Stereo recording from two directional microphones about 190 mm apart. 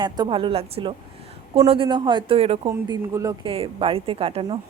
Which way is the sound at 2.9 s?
20° right (ahead or behind).